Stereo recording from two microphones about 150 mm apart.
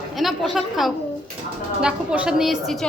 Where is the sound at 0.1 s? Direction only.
Centre (ahead or behind).